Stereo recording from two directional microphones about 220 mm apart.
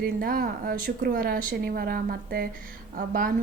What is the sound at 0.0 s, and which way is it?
A woman's voice, 40° right (ahead or behind).